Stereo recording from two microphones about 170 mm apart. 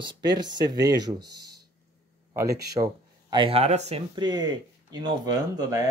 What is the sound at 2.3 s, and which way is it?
Speech, 20° right (ahead or behind).